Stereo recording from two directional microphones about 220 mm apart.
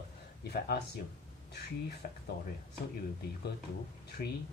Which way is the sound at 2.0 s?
45° left (ahead or behind).